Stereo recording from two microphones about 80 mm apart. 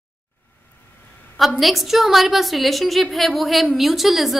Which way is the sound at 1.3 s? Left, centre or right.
Centre.